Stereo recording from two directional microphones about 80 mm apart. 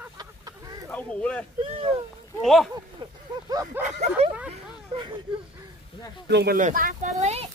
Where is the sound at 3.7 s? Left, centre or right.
Centre.